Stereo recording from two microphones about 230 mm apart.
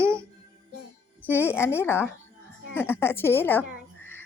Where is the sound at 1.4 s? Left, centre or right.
Centre.